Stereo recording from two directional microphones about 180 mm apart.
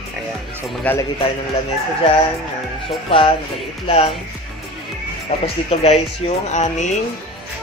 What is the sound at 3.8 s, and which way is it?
Speech, 35° left (ahead or behind).